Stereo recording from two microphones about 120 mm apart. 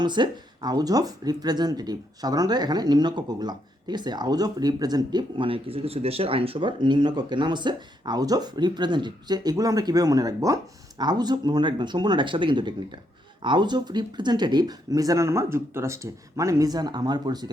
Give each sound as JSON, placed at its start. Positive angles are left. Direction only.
{"t": 0.0, "sound": "speech", "side_deg": -40}